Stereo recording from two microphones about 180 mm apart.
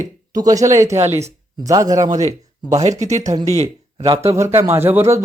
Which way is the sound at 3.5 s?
35° right (ahead or behind).